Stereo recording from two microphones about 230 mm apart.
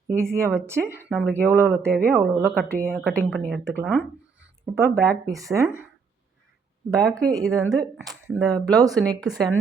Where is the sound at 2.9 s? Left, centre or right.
Centre.